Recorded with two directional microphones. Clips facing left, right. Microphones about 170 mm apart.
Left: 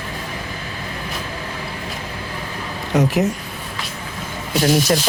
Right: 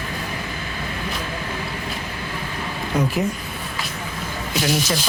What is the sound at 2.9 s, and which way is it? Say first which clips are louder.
Speech: left 4 dB; 80° left.